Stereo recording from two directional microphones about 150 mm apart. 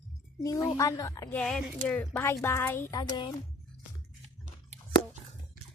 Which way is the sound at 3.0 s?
30° left (ahead or behind).